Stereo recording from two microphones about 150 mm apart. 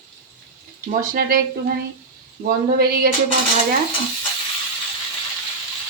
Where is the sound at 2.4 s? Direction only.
80° right.